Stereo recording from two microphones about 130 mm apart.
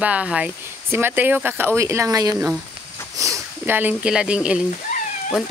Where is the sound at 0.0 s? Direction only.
10° right (ahead or behind).